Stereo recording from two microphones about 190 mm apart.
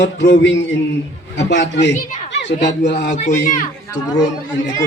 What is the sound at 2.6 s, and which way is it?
Speech, 65° left (ahead or behind).